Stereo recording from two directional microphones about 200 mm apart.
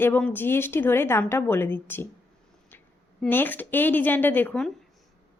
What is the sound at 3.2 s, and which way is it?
A woman's voice, 10° left (ahead or behind).